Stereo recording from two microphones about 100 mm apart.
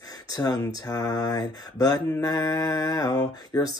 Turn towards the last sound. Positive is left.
turn(degrees=40)  # may be behind; listen again after turning